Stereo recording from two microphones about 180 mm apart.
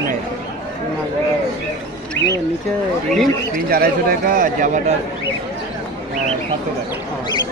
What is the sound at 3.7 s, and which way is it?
A man's voice, 55° right (ahead or behind).